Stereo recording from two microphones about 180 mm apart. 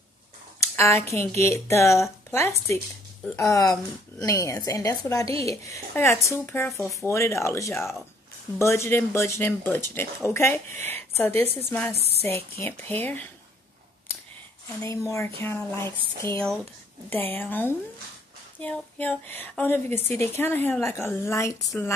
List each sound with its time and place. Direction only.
0.6 s a sound: 15° left (ahead or behind)
1.1 s a woman's voice: 15° left (ahead or behind)
14.8 s speech: 15° left (ahead or behind)